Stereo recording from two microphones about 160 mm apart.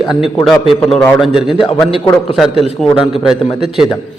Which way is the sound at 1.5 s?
35° left (ahead or behind).